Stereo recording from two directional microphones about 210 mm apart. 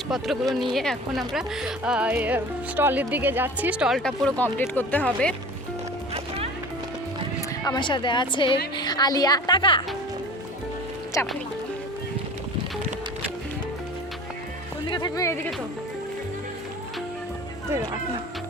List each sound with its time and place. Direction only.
0.1 s speech: centre (ahead or behind)
7.6 s speech: 20° left (ahead or behind)
14.8 s speech: 20° left (ahead or behind)